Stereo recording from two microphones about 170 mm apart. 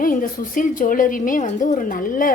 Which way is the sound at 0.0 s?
55° left (ahead or behind).